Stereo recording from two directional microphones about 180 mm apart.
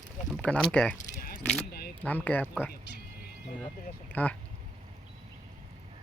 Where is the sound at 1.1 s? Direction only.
50° left (ahead or behind).